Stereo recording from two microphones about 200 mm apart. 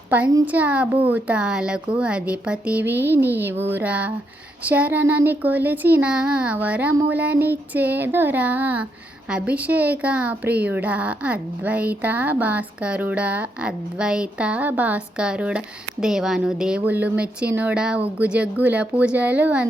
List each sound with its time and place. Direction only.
0.1 s a woman's voice: 5° right (ahead or behind)